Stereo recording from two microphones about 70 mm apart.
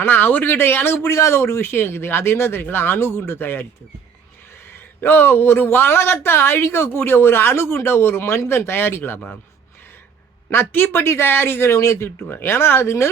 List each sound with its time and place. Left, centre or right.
0.0 s a man's voice: left
4.7 s a man's voice: left
10.5 s a man's voice: left